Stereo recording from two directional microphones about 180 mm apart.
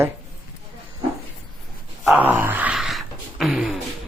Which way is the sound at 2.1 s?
10° right (ahead or behind).